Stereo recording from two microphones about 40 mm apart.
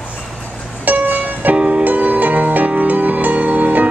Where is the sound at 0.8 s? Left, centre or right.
Right.